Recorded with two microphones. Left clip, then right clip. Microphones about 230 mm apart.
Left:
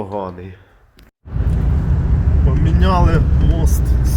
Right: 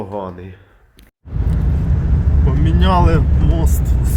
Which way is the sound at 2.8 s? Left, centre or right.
Centre.